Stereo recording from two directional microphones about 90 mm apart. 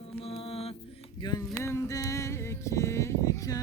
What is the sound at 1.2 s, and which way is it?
Speech, 50° left (ahead or behind).